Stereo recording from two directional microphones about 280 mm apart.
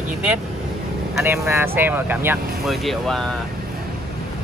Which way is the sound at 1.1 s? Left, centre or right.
Centre.